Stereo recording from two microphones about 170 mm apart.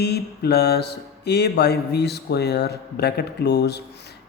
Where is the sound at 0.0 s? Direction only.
70° left (ahead or behind).